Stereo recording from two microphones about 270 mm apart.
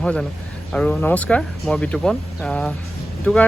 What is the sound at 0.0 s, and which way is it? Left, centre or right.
Speech, centre.